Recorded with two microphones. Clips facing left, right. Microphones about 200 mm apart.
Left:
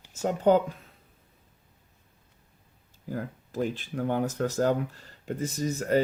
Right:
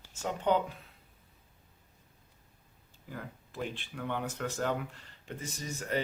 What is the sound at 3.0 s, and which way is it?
Speech, 40° left (ahead or behind).